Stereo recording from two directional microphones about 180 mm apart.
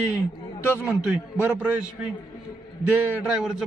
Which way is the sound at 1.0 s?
5° right (ahead or behind).